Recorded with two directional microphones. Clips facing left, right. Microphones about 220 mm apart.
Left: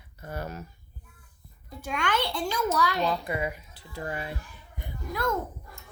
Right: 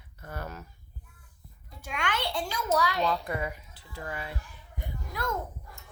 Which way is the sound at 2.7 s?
50° left (ahead or behind).